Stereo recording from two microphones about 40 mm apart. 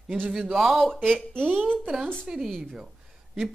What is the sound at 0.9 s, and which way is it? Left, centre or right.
Speech, centre.